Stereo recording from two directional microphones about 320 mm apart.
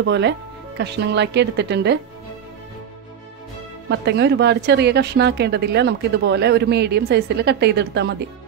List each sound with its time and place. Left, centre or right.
0.0 s a woman's voice: right
3.9 s a woman's voice: right